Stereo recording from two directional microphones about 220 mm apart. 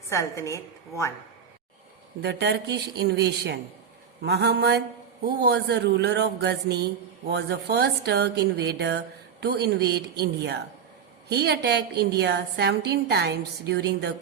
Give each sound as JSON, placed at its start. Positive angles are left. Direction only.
{"t": 0.1, "sound": "a woman's voice", "side_deg": 15}
{"t": 2.2, "sound": "a man's voice", "side_deg": -50}